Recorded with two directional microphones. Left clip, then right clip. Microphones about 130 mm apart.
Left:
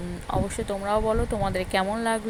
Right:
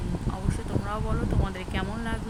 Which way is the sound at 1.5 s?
45° left (ahead or behind).